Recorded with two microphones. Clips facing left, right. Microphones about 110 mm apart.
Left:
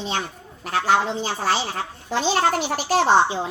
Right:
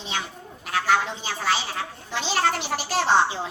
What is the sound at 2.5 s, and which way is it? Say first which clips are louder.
Speech: left 5 dB; 45° left (ahead or behind).